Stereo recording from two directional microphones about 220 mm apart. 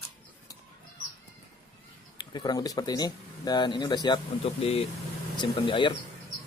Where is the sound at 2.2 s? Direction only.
20° left (ahead or behind).